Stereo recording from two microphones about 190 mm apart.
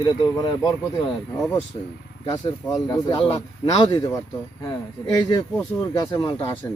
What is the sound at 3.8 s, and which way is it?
Speech, 20° left (ahead or behind).